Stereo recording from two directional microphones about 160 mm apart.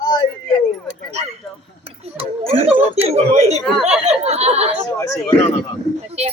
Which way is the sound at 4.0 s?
40° right (ahead or behind).